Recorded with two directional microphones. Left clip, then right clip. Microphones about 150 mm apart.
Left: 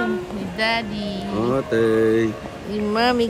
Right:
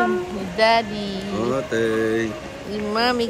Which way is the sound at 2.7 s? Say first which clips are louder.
Left 1 dB; 15° left (ahead or behind).